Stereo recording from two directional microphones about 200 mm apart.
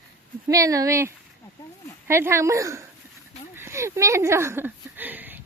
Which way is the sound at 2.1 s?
15° right (ahead or behind).